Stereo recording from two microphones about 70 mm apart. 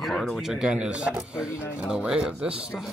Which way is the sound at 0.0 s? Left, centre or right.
Centre.